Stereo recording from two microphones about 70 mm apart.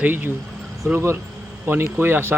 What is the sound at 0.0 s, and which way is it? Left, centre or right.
Speech, right.